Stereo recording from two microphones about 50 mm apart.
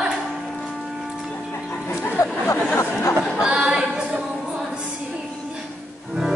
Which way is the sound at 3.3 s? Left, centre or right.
Centre.